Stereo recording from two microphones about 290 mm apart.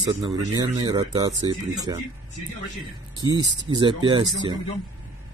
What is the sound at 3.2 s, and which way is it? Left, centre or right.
Speech, centre.